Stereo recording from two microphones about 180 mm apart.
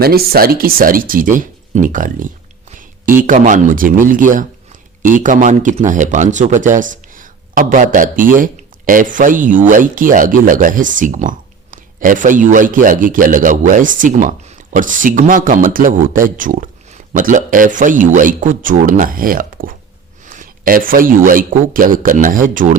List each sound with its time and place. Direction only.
0.0 s a man's voice: 60° right (ahead or behind)